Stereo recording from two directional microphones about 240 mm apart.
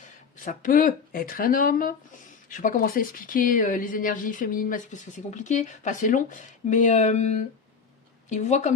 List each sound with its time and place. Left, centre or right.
0.4 s a woman's voice: left